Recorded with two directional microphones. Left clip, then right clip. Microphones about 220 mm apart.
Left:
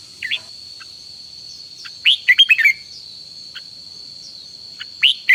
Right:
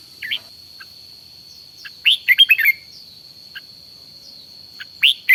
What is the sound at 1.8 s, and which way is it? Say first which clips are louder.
Bird: left 2 dB; 5° right (ahead or behind).